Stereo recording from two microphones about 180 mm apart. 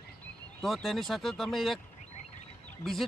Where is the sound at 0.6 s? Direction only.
Centre (ahead or behind).